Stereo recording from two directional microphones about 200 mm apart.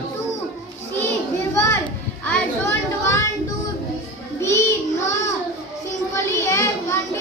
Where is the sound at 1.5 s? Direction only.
10° left (ahead or behind).